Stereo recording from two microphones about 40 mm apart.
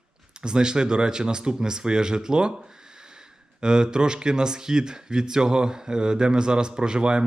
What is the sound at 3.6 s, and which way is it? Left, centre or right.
Speech, right.